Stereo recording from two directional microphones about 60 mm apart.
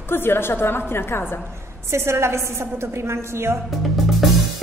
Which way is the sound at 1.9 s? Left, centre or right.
Right.